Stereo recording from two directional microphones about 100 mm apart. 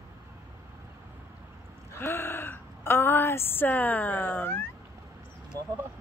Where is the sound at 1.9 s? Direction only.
25° left (ahead or behind).